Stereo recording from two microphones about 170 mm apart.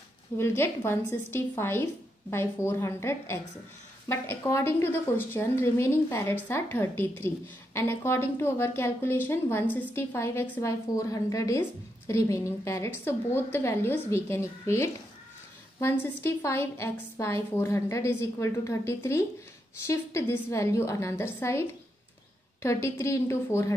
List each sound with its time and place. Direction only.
0.4 s a woman's voice: 15° left (ahead or behind)